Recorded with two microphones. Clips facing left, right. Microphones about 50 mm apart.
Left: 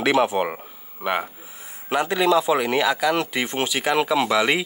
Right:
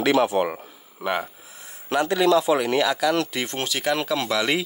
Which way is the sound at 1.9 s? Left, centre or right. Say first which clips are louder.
Even; left.